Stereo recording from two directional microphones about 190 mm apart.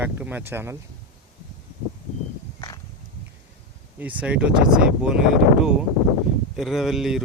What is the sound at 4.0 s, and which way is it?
Speech, 10° right (ahead or behind).